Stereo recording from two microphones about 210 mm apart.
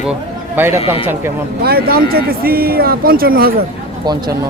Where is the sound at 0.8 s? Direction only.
25° left (ahead or behind).